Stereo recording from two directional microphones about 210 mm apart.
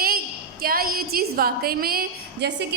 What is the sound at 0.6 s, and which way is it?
A woman's voice, 45° right (ahead or behind).